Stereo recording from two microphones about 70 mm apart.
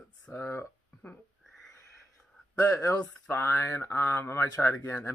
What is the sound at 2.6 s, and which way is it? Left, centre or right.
Speech, left.